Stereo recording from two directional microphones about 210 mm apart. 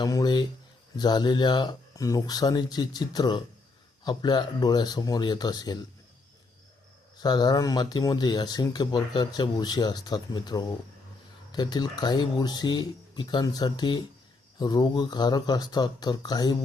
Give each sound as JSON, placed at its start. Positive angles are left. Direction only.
{"t": 0.0, "sound": "speech", "side_deg": 20}
{"t": 7.2, "sound": "speech", "side_deg": 20}